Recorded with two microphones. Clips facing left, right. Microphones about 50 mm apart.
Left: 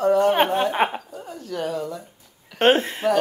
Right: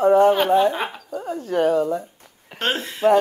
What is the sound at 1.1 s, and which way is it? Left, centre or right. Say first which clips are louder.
Speech: right 12 dB; right.